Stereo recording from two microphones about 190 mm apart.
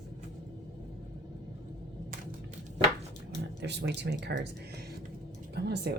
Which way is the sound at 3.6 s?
65° right (ahead or behind).